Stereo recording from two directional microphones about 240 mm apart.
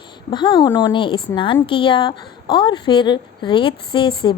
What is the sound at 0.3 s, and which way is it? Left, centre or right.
A woman's voice, centre.